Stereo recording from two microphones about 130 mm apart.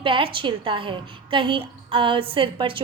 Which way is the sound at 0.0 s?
40° right (ahead or behind).